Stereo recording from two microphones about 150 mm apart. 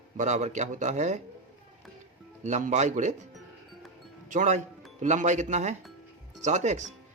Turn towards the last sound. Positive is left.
turn(degrees=-50)  # may be behind; listen again after turning